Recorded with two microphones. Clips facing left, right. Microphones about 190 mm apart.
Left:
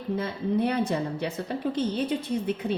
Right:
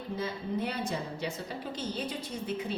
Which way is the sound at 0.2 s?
60° left (ahead or behind).